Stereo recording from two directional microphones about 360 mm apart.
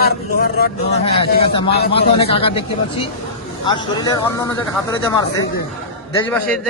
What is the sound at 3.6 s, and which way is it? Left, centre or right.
Speech, centre.